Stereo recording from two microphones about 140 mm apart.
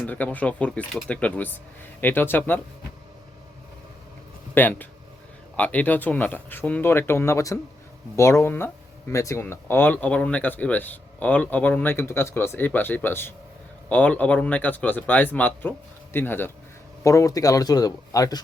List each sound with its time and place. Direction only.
0.0 s speech: 10° left (ahead or behind)
4.5 s speech: 15° left (ahead or behind)